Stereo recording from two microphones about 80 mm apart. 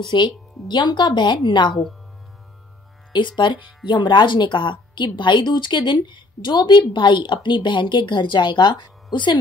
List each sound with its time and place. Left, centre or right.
0.1 s speech: left
3.1 s speech: left